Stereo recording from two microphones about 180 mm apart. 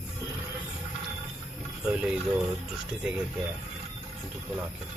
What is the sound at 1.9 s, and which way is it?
Speech, 5° right (ahead or behind).